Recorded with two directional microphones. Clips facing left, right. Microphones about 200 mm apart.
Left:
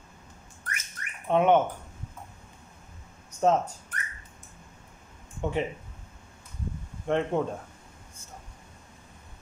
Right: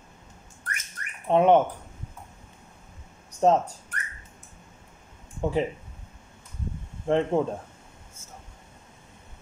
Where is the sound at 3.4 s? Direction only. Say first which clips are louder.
Right 3 dB; 35° right (ahead or behind).